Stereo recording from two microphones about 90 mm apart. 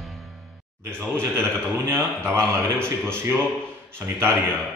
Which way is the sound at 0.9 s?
25° right (ahead or behind).